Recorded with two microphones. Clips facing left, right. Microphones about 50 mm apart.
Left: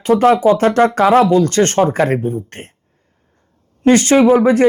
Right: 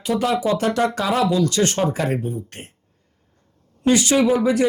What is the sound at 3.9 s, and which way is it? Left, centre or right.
Speech, left.